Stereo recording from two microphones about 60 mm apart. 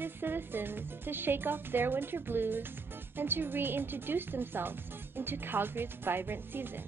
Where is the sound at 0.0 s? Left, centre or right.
Right.